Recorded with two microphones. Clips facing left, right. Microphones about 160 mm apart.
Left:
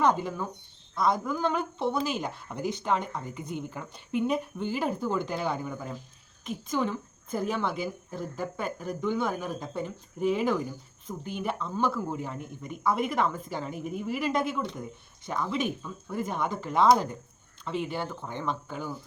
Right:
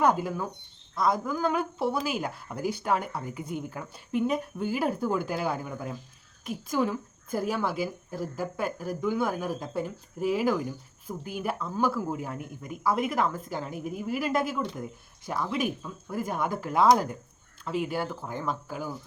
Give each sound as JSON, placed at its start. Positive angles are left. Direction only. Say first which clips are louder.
{"t": 0.0, "sound": "speech", "louder": "right 1 dB", "side_deg": -10}